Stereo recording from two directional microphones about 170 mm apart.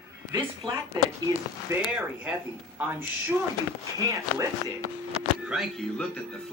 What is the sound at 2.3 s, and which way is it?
Speech, 5° right (ahead or behind).